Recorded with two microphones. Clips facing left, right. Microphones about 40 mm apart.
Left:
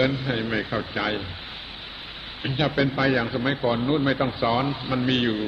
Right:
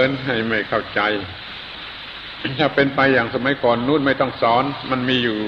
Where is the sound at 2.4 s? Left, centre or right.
Right.